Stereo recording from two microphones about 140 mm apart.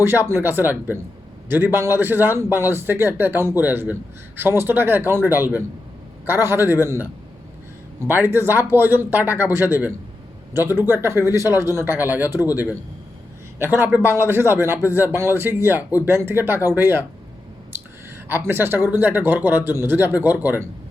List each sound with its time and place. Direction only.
0.0 s a man's voice: 15° right (ahead or behind)
8.3 s a man's voice: 15° right (ahead or behind)
13.6 s a man's voice: 15° right (ahead or behind)
18.3 s a man's voice: 15° right (ahead or behind)